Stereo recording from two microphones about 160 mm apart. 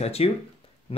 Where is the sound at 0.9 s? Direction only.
35° left (ahead or behind).